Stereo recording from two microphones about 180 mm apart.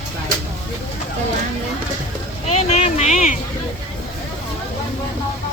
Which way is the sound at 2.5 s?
40° left (ahead or behind).